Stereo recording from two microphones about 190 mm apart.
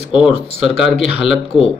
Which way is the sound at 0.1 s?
5° right (ahead or behind).